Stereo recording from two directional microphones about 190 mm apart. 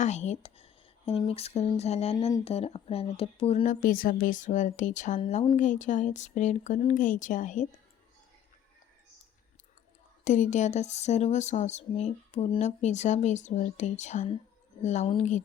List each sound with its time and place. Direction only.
0.0 s speech: 35° left (ahead or behind)
3.8 s speech: 50° left (ahead or behind)
10.2 s speech: 40° left (ahead or behind)